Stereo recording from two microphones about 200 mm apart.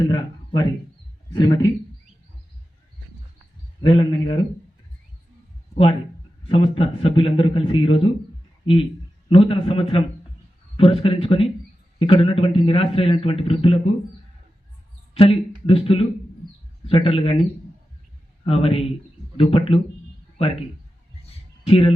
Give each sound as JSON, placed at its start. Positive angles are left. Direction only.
{"t": 0.0, "sound": "a man's voice", "side_deg": 20}
{"t": 3.8, "sound": "a man's voice", "side_deg": 25}
{"t": 6.5, "sound": "a man's voice", "side_deg": 25}
{"t": 15.1, "sound": "a man's voice", "side_deg": 30}
{"t": 18.4, "sound": "a man's voice", "side_deg": 30}
{"t": 21.2, "sound": "a sound", "side_deg": 30}